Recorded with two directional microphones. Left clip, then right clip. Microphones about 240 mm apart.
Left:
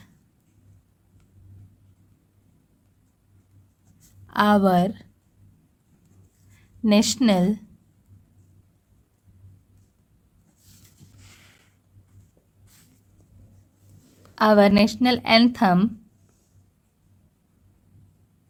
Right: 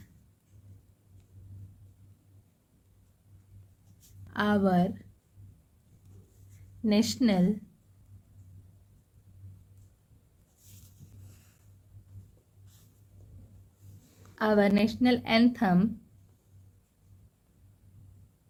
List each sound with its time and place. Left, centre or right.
4.3 s a woman's voice: left
6.8 s a woman's voice: left
14.3 s a woman's voice: left